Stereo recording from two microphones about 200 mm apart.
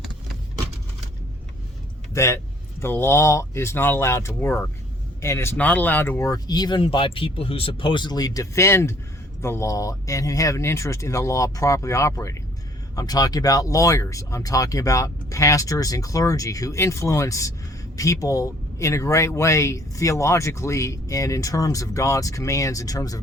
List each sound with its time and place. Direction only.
2.1 s speech: 15° left (ahead or behind)